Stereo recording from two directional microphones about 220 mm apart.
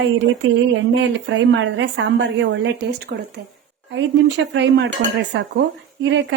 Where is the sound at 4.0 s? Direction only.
55° right (ahead or behind).